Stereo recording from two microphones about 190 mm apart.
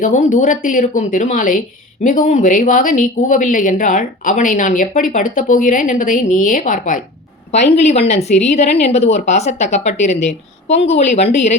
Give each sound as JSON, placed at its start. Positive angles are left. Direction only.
{"t": 0.0, "sound": "a woman's voice", "side_deg": 40}